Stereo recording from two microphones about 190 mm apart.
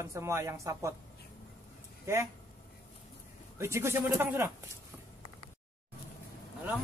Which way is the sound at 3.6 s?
15° right (ahead or behind).